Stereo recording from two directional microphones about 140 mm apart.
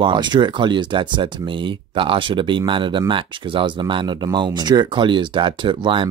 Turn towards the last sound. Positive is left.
turn(degrees=-35)  # may be behind; listen again after turning